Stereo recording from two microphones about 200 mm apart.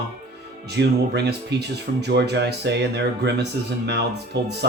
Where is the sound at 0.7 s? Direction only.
55° right (ahead or behind).